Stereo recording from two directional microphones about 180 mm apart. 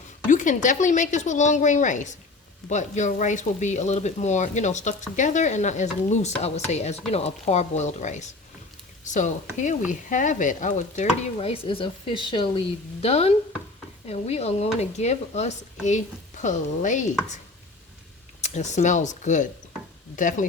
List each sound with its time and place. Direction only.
0.3 s speech: 45° left (ahead or behind)
11.3 s speech: 30° left (ahead or behind)
18.4 s speech: 40° left (ahead or behind)